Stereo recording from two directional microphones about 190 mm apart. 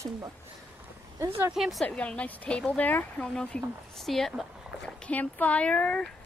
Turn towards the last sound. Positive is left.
turn(degrees=5)  # may be behind; listen again after turning